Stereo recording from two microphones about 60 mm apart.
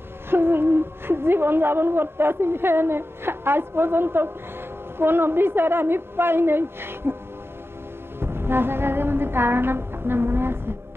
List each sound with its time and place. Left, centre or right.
0.3 s a woman's voice: right
8.2 s music: right